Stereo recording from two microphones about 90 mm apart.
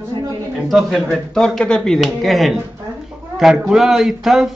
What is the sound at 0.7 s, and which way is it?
A man's voice, centre (ahead or behind).